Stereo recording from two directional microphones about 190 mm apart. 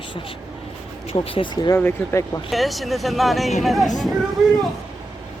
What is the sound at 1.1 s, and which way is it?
Speech, 30° left (ahead or behind).